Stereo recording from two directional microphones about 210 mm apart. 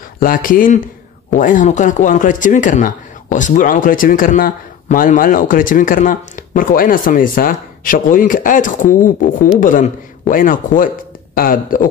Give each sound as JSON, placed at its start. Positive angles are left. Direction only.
{"t": 0.2, "sound": "speech", "side_deg": 40}